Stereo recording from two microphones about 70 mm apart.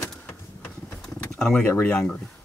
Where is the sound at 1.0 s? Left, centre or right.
Centre.